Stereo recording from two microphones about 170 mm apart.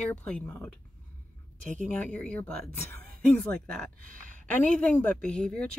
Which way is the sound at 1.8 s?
5° left (ahead or behind).